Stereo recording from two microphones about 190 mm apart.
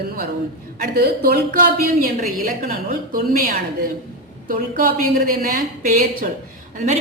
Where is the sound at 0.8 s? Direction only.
55° right (ahead or behind).